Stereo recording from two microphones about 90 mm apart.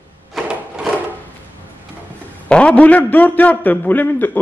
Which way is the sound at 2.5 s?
10° left (ahead or behind).